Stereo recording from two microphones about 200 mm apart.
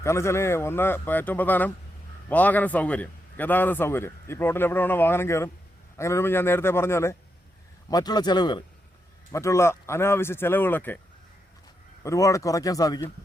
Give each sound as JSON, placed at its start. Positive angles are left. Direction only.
{"t": 0.0, "sound": "a man's voice", "side_deg": 15}
{"t": 12.0, "sound": "a man's voice", "side_deg": 15}